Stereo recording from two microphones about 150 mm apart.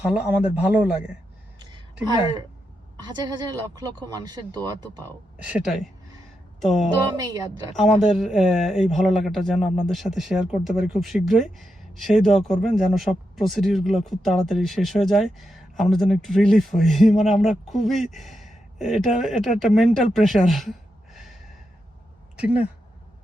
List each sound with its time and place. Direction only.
0.1 s a man's voice: 10° right (ahead or behind)
2.0 s speech: 30° right (ahead or behind)
5.5 s speech: 5° right (ahead or behind)
7.0 s speech: 25° right (ahead or behind)
8.0 s speech: centre (ahead or behind)
22.4 s speech: 10° right (ahead or behind)